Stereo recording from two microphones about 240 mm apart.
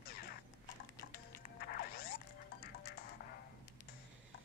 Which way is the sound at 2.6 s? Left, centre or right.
Left.